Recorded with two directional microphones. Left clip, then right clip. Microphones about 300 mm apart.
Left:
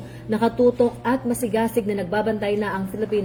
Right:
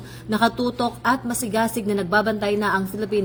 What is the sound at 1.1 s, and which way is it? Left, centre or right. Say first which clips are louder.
A woman's voice: even; right.